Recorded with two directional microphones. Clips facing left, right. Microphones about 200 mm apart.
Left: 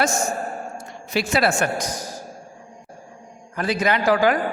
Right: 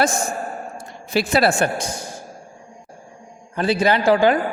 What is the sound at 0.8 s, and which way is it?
A woman's voice, 35° right (ahead or behind).